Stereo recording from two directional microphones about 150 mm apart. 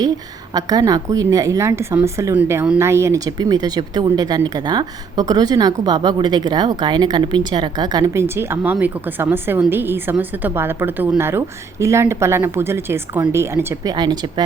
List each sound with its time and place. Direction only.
0.5 s speech: 25° right (ahead or behind)
13.9 s speech: 30° right (ahead or behind)